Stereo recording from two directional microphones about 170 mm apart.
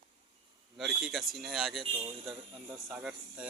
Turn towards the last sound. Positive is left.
turn(degrees=-10)  # may be behind; listen again after turning